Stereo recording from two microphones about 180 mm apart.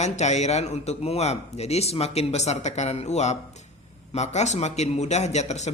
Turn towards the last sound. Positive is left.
turn(degrees=40)  # may be behind; listen again after turning